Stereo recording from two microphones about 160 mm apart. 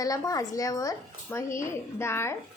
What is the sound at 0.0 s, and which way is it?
A woman's voice, 20° left (ahead or behind).